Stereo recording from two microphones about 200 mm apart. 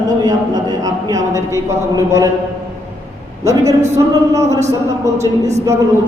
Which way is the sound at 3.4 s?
15° right (ahead or behind).